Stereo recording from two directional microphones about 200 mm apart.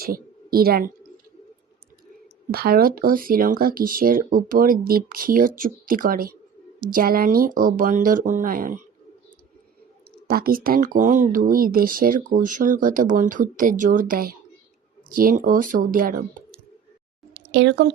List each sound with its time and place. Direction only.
0.0 s a sound: 50° right (ahead or behind)
2.5 s speech: 50° right (ahead or behind)
10.2 s speech: 45° right (ahead or behind)
17.3 s speech: 60° right (ahead or behind)